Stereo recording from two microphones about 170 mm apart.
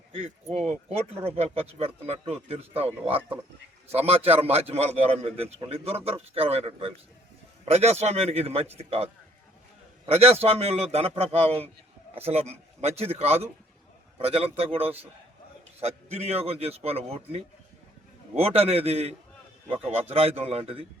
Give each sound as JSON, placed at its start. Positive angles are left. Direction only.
{"t": 0.7, "sound": "speech", "side_deg": -40}
{"t": 10.1, "sound": "speech", "side_deg": -40}